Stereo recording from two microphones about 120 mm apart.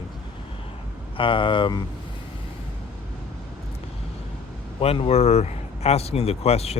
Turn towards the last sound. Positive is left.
turn(degrees=60)  # may be behind; listen again after turning